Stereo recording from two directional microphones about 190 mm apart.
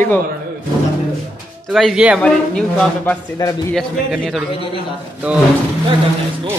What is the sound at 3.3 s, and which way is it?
Speech, 20° left (ahead or behind).